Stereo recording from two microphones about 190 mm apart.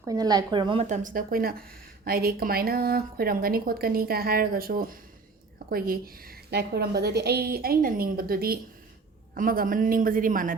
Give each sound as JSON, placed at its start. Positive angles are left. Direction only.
{"t": 0.0, "sound": "speech", "side_deg": -20}
{"t": 0.9, "sound": "speech", "side_deg": -40}